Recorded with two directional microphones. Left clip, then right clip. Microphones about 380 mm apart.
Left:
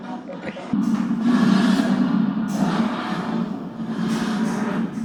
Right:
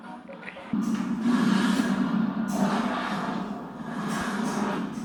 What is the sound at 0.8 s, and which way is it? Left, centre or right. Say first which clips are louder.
Music: left 6 dB; centre.